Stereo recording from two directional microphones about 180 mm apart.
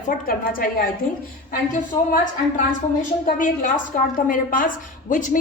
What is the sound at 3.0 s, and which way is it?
A woman's voice, 45° left (ahead or behind).